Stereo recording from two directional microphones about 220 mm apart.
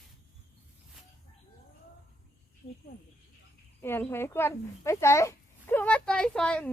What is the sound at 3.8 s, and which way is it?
Speech, 10° left (ahead or behind).